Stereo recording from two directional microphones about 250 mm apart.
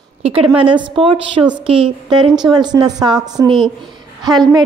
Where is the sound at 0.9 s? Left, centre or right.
Right.